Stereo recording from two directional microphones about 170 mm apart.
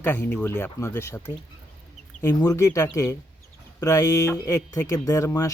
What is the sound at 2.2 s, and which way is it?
Speech, 20° left (ahead or behind).